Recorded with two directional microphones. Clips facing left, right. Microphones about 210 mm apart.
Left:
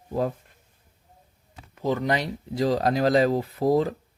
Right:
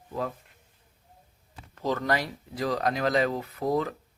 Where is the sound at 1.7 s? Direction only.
15° left (ahead or behind).